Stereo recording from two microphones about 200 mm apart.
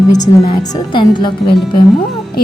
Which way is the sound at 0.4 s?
25° left (ahead or behind).